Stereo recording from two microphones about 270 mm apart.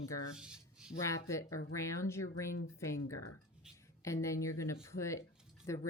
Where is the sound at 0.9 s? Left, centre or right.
Centre.